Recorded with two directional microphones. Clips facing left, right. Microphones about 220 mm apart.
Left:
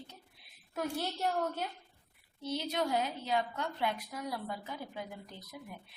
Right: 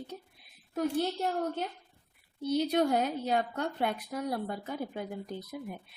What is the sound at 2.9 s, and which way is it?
A woman's voice, 50° right (ahead or behind).